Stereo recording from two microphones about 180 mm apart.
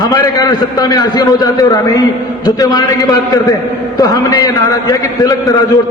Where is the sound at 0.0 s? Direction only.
20° left (ahead or behind).